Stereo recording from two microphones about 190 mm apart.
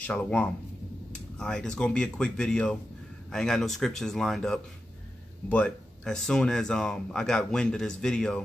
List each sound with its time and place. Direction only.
0.0 s speech: 5° left (ahead or behind)